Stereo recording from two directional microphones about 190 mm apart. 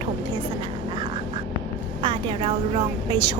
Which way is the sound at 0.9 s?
25° right (ahead or behind).